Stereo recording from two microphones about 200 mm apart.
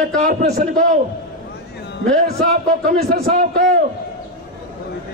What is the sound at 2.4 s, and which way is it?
A man's voice, 45° right (ahead or behind).